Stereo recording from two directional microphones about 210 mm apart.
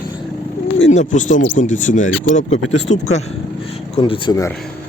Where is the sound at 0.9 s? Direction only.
35° left (ahead or behind); by 4.5 s 15° left (ahead or behind).